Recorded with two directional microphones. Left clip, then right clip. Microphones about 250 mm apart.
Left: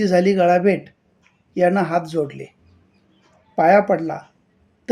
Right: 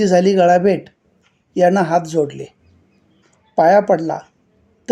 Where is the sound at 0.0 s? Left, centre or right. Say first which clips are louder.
Right 4 dB; centre.